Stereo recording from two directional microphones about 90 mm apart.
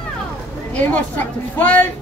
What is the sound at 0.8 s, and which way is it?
A woman's voice, 20° left (ahead or behind).